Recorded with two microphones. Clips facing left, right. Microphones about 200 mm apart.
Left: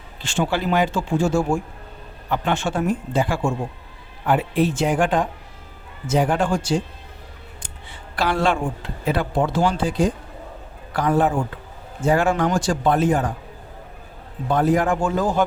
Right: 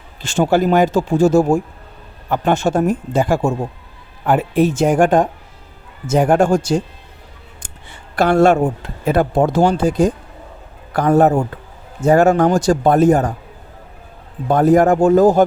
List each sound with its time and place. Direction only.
0.2 s speech: 40° right (ahead or behind)
14.4 s speech: 45° right (ahead or behind)